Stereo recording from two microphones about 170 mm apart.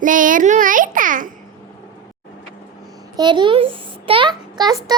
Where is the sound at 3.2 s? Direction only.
25° right (ahead or behind).